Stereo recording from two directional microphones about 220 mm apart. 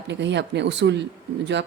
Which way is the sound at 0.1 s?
55° right (ahead or behind).